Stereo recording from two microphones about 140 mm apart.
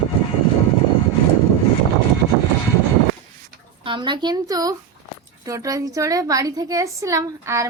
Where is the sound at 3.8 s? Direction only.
35° right (ahead or behind).